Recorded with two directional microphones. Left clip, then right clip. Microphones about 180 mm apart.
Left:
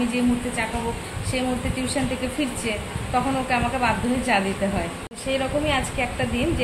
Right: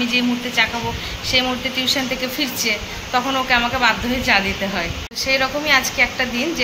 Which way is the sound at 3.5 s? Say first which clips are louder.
Right 7 dB; 5° left (ahead or behind).